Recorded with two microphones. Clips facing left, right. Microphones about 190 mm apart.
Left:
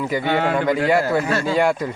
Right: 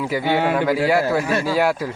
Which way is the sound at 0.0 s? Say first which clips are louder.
Even; 5° right (ahead or behind).